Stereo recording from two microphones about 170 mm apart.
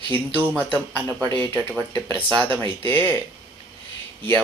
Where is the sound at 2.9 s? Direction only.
10° left (ahead or behind).